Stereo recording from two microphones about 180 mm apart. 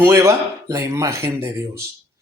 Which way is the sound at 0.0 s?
15° right (ahead or behind).